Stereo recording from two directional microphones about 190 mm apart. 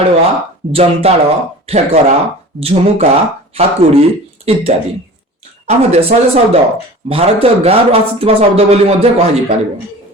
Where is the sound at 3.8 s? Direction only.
30° right (ahead or behind).